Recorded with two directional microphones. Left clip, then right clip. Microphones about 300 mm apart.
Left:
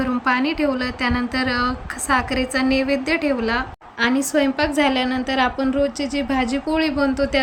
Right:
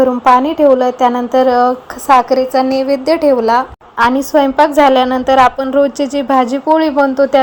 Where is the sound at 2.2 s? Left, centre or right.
Centre.